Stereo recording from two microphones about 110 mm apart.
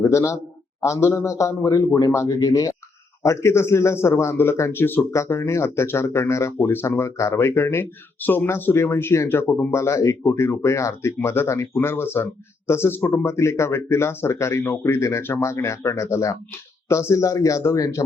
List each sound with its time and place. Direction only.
0.0 s a man's voice: 30° left (ahead or behind)